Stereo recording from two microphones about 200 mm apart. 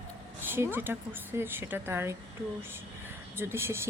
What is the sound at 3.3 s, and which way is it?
Speech, 10° right (ahead or behind).